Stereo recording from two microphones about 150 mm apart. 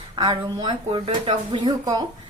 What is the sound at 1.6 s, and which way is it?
Speech, 25° right (ahead or behind).